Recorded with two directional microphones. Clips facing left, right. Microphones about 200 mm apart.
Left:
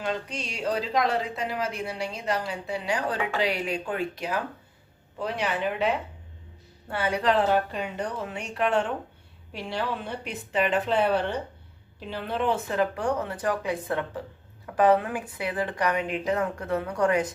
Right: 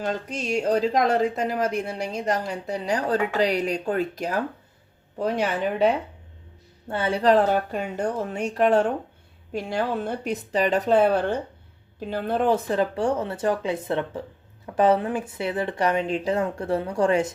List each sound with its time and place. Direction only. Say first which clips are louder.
0.0 s speech: right 3 dB; 45° right (ahead or behind)
6.9 s a woman's voice: right 5 dB; 30° right (ahead or behind)